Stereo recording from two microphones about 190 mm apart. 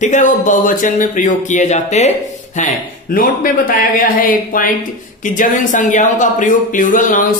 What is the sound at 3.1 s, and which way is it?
Speech, 50° left (ahead or behind).